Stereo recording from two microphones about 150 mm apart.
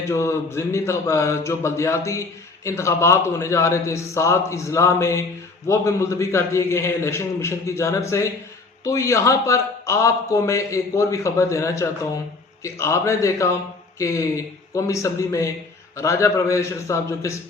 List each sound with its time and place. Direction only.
0.1 s speech: 20° left (ahead or behind)